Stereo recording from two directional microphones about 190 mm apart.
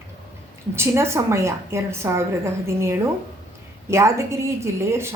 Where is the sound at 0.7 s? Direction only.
15° right (ahead or behind).